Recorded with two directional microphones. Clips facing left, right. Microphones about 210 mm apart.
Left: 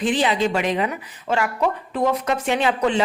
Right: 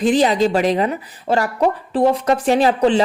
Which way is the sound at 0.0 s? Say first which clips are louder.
Right 5 dB; 40° right (ahead or behind).